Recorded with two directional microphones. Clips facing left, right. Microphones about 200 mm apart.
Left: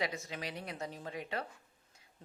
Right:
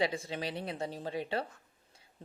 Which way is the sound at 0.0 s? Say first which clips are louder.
Right 5 dB; 30° right (ahead or behind).